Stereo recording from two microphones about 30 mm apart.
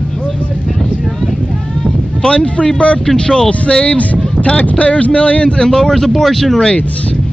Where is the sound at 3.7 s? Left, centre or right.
Left.